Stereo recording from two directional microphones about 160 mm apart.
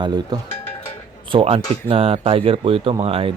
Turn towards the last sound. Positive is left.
turn(degrees=-35)  # may be behind; listen again after turning